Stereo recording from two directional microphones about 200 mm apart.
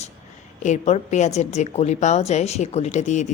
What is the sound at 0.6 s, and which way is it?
A woman's voice, 35° left (ahead or behind).